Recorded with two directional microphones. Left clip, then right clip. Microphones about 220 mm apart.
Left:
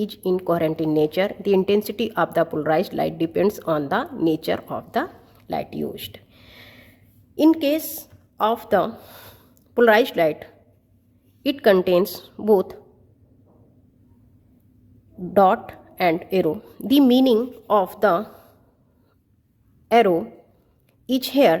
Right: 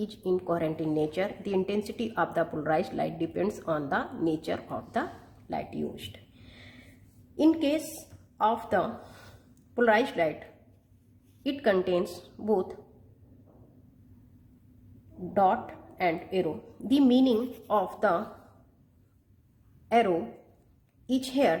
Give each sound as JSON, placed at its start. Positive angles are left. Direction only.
{"t": 0.0, "sound": "speech", "side_deg": 40}
{"t": 5.5, "sound": "a sound", "side_deg": 40}
{"t": 7.3, "sound": "a woman's voice", "side_deg": 40}
{"t": 15.3, "sound": "speech", "side_deg": 45}
{"t": 19.9, "sound": "speech", "side_deg": 40}